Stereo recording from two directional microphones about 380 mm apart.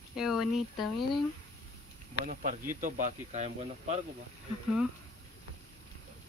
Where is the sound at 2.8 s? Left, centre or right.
Centre.